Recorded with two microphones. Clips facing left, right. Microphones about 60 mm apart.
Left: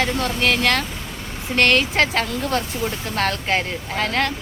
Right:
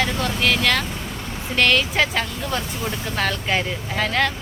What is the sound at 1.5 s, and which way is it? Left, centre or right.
Speech, left.